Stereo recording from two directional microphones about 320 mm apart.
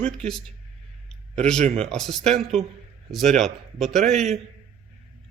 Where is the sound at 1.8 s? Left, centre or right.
Centre.